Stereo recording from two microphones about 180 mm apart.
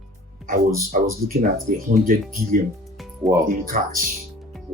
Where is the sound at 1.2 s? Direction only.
50° right (ahead or behind).